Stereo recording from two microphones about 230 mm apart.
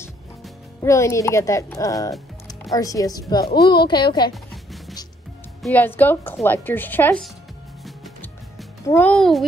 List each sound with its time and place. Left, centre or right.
0.8 s a woman's voice: centre
5.6 s speech: centre
7.8 s music: centre
8.8 s a child's voice: centre